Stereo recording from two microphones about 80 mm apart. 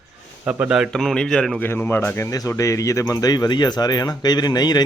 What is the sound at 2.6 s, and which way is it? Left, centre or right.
Speech, left.